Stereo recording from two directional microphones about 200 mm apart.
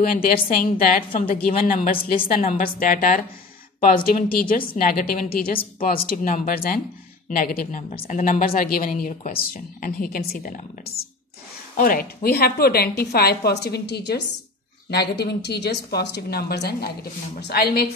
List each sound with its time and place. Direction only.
0.0 s a woman's voice: 45° left (ahead or behind)
11.7 s a woman's voice: 45° left (ahead or behind)